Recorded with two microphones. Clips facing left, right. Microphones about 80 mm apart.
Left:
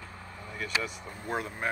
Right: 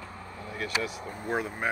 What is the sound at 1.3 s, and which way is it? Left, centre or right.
Speech, centre.